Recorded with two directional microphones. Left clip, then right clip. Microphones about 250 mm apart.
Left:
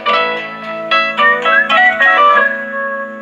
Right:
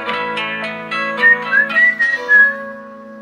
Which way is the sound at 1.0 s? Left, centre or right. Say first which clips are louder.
Right 2 dB; left.